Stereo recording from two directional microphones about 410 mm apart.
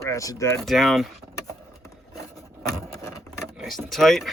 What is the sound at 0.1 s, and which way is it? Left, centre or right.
Speech, centre.